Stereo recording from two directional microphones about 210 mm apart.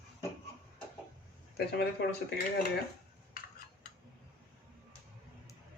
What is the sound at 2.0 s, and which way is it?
Speech, 55° left (ahead or behind).